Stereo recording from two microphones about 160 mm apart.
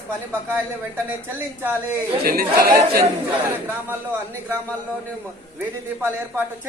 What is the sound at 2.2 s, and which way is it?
Speech, 70° right (ahead or behind).